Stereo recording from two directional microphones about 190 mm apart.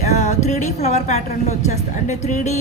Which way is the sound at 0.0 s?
40° left (ahead or behind).